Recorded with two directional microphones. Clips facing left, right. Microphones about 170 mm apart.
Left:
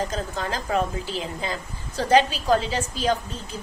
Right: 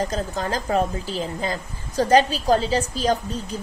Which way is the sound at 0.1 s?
40° right (ahead or behind).